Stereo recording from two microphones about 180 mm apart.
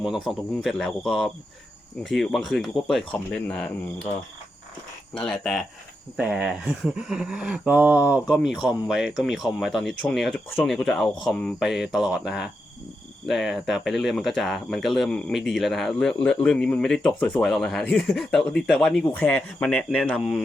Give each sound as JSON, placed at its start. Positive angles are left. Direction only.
{"t": 0.0, "sound": "speech", "side_deg": 0}
{"t": 5.1, "sound": "speech", "side_deg": 5}